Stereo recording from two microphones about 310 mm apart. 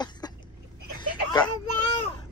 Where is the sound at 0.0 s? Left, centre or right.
Centre.